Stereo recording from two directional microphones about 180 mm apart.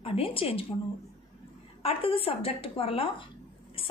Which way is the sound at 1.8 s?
30° left (ahead or behind).